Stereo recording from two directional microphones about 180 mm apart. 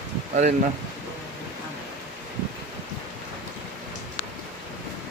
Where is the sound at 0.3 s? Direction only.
45° right (ahead or behind).